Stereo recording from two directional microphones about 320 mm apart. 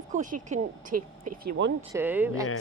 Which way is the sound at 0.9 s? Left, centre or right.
Right.